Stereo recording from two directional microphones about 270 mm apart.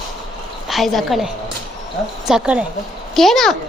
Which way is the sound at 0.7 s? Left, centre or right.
Centre.